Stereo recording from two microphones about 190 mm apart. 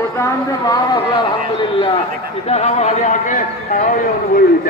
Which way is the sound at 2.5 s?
35° left (ahead or behind).